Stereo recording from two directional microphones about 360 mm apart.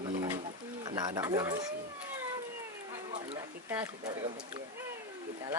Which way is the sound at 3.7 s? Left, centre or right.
Centre.